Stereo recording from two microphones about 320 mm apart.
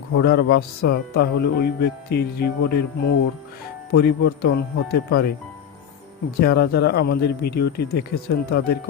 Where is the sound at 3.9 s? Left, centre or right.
Left.